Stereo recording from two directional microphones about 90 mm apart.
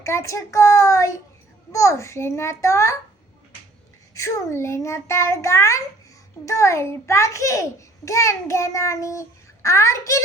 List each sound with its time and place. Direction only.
0.0 s a child's voice: 35° left (ahead or behind)
4.1 s a child's voice: 30° left (ahead or behind)